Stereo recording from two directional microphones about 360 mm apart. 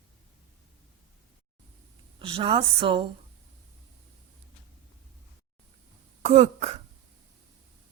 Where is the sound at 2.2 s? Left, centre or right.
Centre.